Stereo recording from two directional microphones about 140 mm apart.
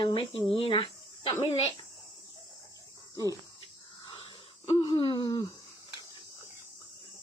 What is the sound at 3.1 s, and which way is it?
Cricket, 25° left (ahead or behind).